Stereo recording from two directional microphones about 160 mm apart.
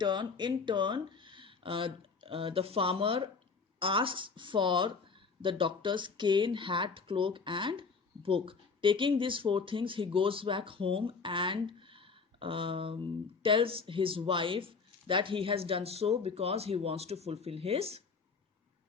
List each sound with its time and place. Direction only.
0.0 s speech: 30° right (ahead or behind)